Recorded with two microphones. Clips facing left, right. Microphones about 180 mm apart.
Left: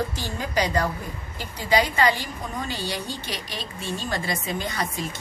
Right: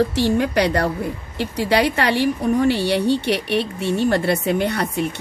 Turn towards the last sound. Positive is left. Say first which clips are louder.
# right 8 dB
turn(degrees=-65)  # may be behind; listen again after turning